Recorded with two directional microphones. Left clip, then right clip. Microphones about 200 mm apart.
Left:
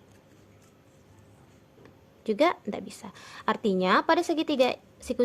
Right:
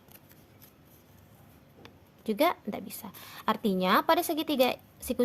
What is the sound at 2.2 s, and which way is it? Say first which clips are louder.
Speech: left 3 dB; 20° right (ahead or behind).